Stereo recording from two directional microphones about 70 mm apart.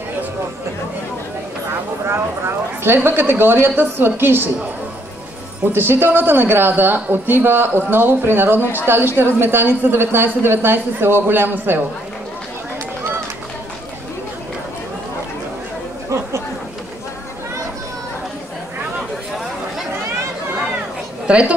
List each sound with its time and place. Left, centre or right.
1.7 s speech: right
5.7 s speech: right
21.3 s a woman's voice: centre